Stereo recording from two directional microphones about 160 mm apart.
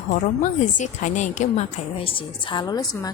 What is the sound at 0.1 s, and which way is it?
A woman's voice, 50° left (ahead or behind).